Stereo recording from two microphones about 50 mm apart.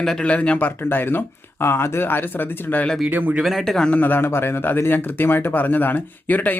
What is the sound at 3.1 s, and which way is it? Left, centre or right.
Speech, right.